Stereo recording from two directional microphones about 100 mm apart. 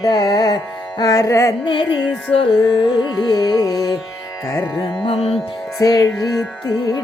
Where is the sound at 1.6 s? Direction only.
55° left (ahead or behind).